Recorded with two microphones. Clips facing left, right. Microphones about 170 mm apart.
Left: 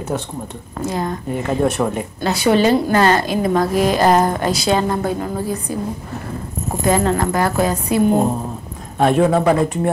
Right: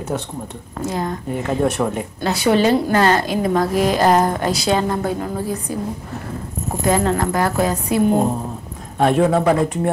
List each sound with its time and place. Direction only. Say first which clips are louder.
0.7 s a woman's voice: left 1 dB; 20° left (ahead or behind)
4.6 s a woman's voice: left 1 dB; 10° left (ahead or behind)
4.8 s a woman's voice: left 1 dB; 20° left (ahead or behind)
6.8 s a woman's voice: left 1 dB; 20° left (ahead or behind)
8.1 s speech: left 1 dB; 35° left (ahead or behind)
9.0 s a woman's voice: left 1 dB; 20° left (ahead or behind)